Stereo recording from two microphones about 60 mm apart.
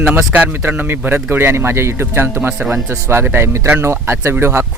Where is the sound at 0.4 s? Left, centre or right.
Right.